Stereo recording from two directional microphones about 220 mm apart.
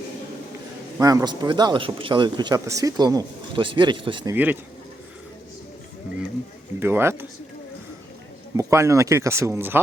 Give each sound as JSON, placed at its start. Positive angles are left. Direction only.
{"t": 0.9, "sound": "speech", "side_deg": -15}
{"t": 6.7, "sound": "speech", "side_deg": -10}
{"t": 8.5, "sound": "speech", "side_deg": -15}